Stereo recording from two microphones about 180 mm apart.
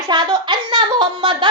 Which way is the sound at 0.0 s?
20° right (ahead or behind).